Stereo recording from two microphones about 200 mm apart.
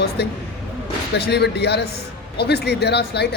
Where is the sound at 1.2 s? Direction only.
55° left (ahead or behind).